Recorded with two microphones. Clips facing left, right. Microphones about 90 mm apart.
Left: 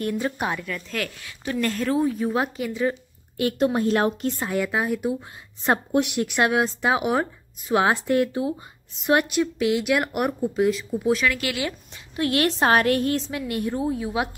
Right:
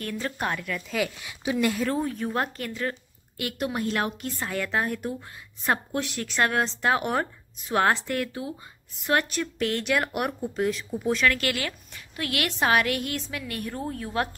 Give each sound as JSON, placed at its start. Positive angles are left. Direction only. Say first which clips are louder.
{"t": 0.0, "sound": "speech", "louder": "left 4 dB", "side_deg": 15}
{"t": 1.9, "sound": "speech", "louder": "left 5 dB", "side_deg": 5}
{"t": 3.3, "sound": "a woman's voice", "louder": "left 8 dB", "side_deg": 30}
{"t": 4.4, "sound": "speech", "louder": "right 1 dB", "side_deg": 10}
{"t": 5.6, "sound": "a woman's voice", "louder": "left 4 dB", "side_deg": 30}
{"t": 5.9, "sound": "speech", "louder": "left 5 dB", "side_deg": 15}
{"t": 8.1, "sound": "a woman's voice", "louder": "left 8 dB", "side_deg": 25}
{"t": 11.9, "sound": "a woman's voice", "louder": "left 7 dB", "side_deg": 30}